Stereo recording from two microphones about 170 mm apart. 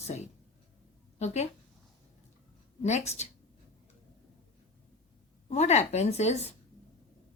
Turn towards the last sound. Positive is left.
turn(degrees=40)  # may be behind; listen again after turning